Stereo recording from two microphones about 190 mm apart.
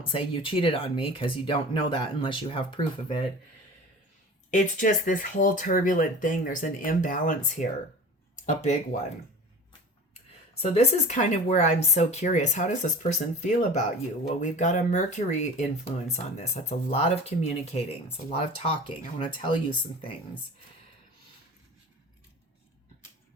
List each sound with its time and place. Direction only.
0.1 s speech: 30° left (ahead or behind)
4.5 s speech: 45° left (ahead or behind)
10.6 s speech: 35° left (ahead or behind)